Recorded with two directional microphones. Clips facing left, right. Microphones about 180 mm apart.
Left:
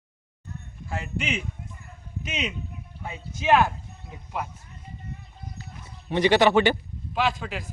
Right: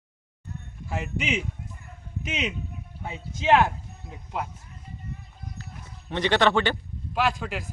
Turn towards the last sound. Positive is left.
turn(degrees=-10)  # may be behind; listen again after turning